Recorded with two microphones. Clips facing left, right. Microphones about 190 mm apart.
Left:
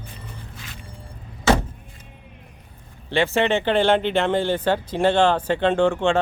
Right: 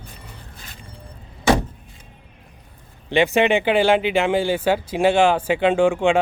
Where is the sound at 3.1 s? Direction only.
15° right (ahead or behind).